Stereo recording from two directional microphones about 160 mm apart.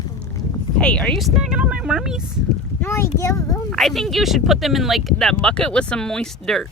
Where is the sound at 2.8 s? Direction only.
15° left (ahead or behind).